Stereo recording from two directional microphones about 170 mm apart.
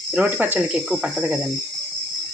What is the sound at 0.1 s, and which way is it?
Speech, 10° right (ahead or behind).